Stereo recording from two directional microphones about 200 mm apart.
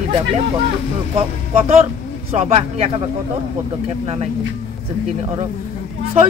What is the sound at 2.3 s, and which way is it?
Speech, 35° right (ahead or behind).